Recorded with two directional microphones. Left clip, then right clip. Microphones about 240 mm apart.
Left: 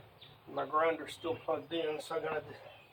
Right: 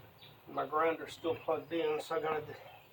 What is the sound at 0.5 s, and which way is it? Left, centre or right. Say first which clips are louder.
Speech: left 1 dB; right.